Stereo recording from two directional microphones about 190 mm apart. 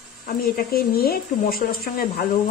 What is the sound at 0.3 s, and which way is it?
Speech, 50° left (ahead or behind).